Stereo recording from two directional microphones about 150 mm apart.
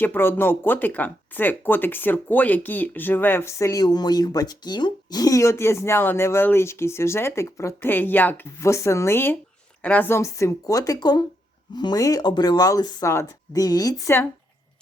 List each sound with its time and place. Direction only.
0.0 s speech: 15° left (ahead or behind)